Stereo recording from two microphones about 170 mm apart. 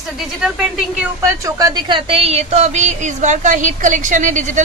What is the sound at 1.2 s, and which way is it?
A woman's voice, 20° right (ahead or behind).